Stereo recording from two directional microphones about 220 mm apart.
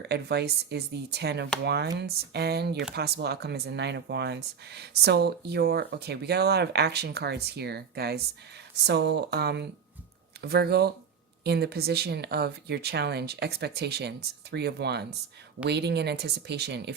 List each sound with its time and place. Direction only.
0.1 s speech: 50° right (ahead or behind)